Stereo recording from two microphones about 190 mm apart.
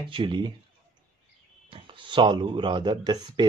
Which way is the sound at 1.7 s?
25° right (ahead or behind).